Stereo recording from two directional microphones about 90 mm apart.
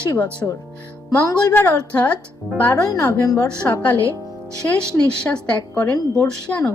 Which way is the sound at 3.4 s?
15° left (ahead or behind).